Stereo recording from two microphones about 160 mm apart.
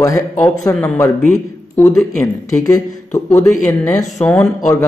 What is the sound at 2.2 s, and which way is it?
Speech, 20° left (ahead or behind).